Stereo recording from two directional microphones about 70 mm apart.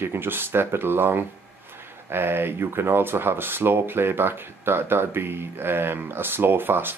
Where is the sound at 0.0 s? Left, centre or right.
Right.